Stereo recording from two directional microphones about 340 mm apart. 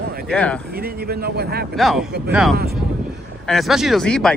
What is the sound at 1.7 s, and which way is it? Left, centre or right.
Speech, centre.